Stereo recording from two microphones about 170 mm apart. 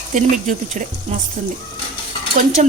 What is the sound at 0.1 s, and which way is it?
Speech, 45° right (ahead or behind).